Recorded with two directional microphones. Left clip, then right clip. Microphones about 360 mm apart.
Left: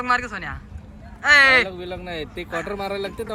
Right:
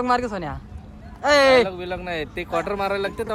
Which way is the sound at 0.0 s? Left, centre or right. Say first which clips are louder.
Even; centre.